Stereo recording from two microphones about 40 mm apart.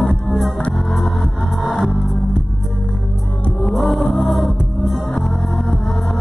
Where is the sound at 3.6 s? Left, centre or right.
Centre.